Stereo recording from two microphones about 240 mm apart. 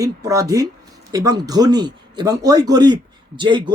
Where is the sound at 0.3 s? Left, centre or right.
Centre.